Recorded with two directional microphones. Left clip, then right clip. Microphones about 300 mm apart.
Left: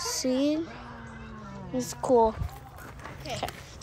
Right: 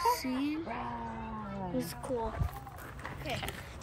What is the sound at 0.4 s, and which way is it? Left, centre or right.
Speech, centre.